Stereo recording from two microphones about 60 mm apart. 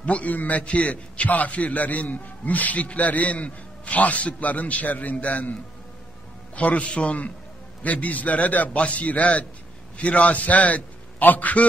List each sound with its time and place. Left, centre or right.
0.0 s a man's voice: left